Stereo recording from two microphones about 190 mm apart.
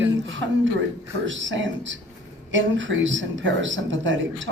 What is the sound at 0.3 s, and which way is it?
Speech, 80° right.